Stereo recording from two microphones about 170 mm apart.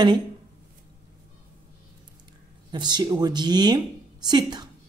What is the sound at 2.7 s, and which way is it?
A woman's voice, 25° right (ahead or behind).